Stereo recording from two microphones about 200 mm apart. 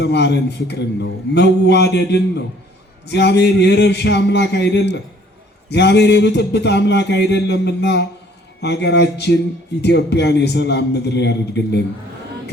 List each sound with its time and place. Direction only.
0.0 s speech: 60° left (ahead or behind)